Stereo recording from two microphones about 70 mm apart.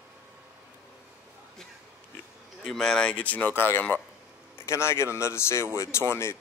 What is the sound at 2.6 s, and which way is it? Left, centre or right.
Speech, centre.